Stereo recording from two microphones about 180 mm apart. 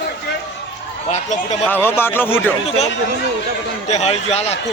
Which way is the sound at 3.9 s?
35° left (ahead or behind).